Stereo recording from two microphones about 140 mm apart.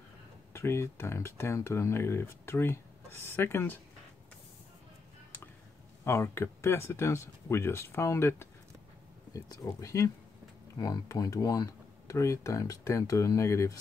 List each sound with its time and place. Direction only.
0.5 s speech: 20° left (ahead or behind)
6.0 s speech: 20° left (ahead or behind)